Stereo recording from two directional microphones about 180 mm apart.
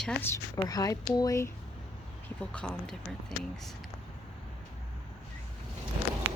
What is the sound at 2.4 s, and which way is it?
Speech, 5° left (ahead or behind).